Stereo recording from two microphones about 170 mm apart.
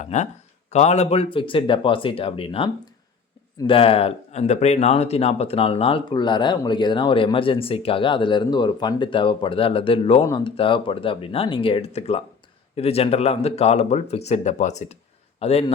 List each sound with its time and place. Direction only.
0.0 s speech: 45° left (ahead or behind)
3.7 s speech: 35° left (ahead or behind)